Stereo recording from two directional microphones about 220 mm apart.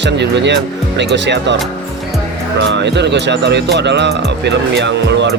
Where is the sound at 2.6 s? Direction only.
55° right (ahead or behind).